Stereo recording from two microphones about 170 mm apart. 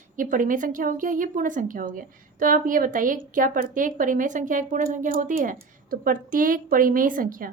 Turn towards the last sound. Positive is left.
turn(degrees=-55)  # may be behind; listen again after turning